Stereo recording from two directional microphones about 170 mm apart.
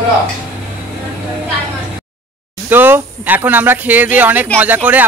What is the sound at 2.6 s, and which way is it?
Speech, 10° right (ahead or behind).